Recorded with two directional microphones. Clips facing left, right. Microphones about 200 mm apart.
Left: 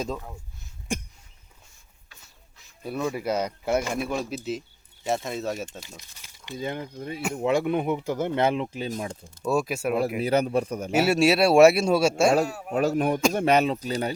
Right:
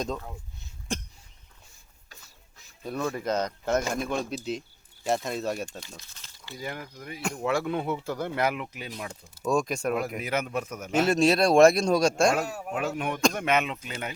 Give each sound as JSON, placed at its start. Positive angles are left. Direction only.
{"t": 0.0, "sound": "speech", "side_deg": 5}
{"t": 0.9, "sound": "a sound", "side_deg": 10}
{"t": 2.8, "sound": "speech", "side_deg": 10}
{"t": 6.0, "sound": "speech", "side_deg": 15}
{"t": 7.2, "sound": "speech", "side_deg": 5}
{"t": 7.4, "sound": "speech", "side_deg": 20}
{"t": 9.5, "sound": "speech", "side_deg": 5}
{"t": 10.2, "sound": "a man's voice", "side_deg": 35}
{"t": 10.9, "sound": "speech", "side_deg": 10}
{"t": 12.7, "sound": "a man's voice", "side_deg": 40}